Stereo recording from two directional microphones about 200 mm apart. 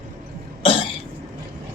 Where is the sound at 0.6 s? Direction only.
25° left (ahead or behind).